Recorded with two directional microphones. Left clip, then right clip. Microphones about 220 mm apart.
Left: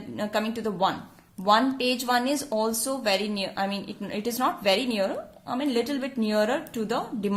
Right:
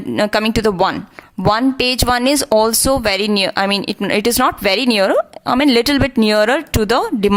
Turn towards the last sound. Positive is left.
turn(degrees=-40)  # may be behind; listen again after turning